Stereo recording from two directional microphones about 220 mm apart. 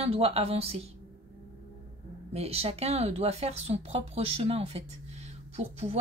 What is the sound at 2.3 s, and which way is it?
Speech, 30° right (ahead or behind).